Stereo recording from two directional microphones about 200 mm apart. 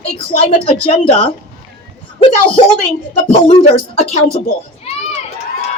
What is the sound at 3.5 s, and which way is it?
Speech, 30° left (ahead or behind).